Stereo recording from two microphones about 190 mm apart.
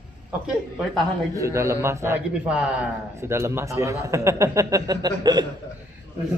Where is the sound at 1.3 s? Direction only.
15° right (ahead or behind).